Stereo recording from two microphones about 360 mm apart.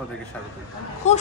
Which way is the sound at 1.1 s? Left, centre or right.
Centre.